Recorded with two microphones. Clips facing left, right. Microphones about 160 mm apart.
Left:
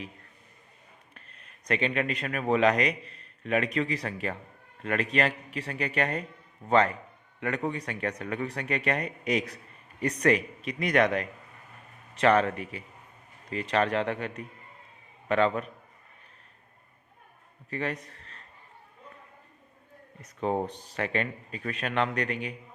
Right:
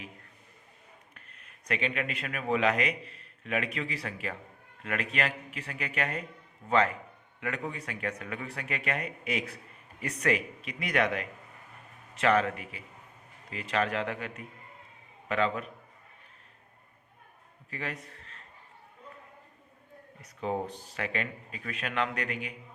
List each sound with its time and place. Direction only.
1.1 s a man's voice: 30° left (ahead or behind)
17.7 s a sound: 40° left (ahead or behind)
20.2 s a man's voice: 40° left (ahead or behind)